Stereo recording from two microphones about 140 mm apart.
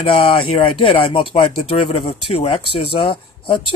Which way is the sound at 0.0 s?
40° left (ahead or behind).